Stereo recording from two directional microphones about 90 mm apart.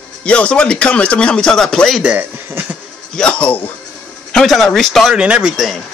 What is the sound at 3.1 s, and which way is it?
Speech, 10° left (ahead or behind).